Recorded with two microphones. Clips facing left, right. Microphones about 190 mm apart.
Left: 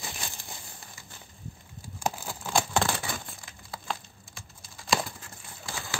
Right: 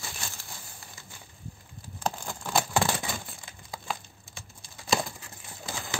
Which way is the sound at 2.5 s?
10° right (ahead or behind).